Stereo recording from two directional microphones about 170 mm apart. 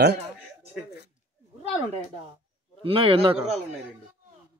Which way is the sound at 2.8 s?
30° right (ahead or behind).